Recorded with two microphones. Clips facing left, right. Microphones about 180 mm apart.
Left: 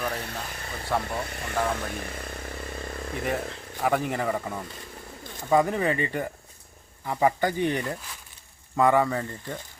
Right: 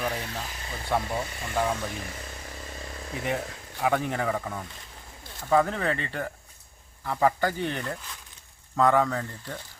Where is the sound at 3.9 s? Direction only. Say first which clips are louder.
Left 1 dB; 5° left (ahead or behind).